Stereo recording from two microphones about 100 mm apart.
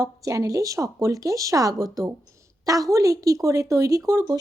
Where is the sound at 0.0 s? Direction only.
35° right (ahead or behind).